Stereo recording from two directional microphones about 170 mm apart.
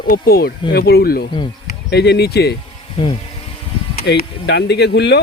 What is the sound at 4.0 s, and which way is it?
Speech, 75° left (ahead or behind).